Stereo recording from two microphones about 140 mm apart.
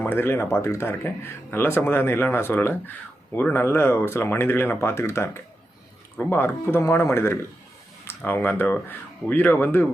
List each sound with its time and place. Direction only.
0.0 s speech: 15° left (ahead or behind)